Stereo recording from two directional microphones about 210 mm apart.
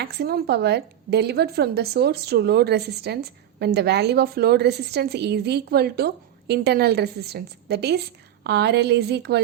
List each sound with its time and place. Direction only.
0.0 s a woman's voice: 50° right (ahead or behind)